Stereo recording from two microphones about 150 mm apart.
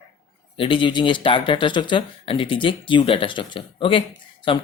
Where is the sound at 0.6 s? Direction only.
35° left (ahead or behind).